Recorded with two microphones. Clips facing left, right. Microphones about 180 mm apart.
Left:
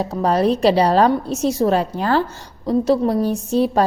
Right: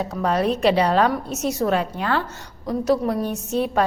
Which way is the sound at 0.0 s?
35° left (ahead or behind).